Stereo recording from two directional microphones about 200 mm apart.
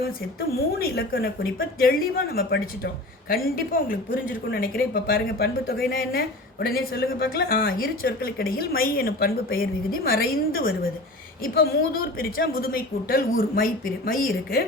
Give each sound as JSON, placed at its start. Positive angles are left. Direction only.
{"t": 0.5, "sound": "a woman's voice", "side_deg": 50}